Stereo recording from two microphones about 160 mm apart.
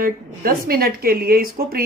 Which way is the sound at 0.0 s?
65° right (ahead or behind).